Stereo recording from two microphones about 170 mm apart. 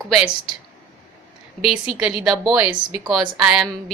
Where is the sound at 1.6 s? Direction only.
5° right (ahead or behind).